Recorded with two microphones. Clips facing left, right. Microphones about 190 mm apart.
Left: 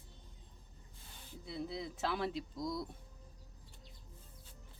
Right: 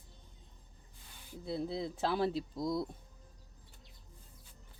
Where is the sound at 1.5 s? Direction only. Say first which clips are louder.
Right 5 dB; 30° right (ahead or behind).